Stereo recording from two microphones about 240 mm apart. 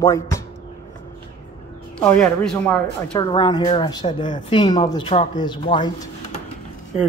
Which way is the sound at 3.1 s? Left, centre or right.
Centre.